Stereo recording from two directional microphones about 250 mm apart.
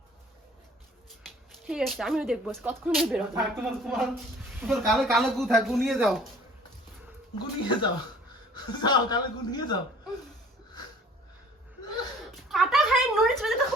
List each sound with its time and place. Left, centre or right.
1.2 s speech: centre
7.3 s speech: centre
12.2 s a sound: centre